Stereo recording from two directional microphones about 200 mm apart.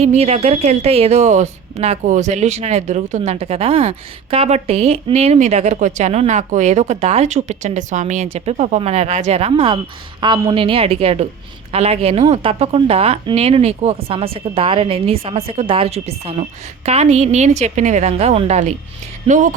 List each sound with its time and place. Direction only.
0.0 s speech: 30° right (ahead or behind)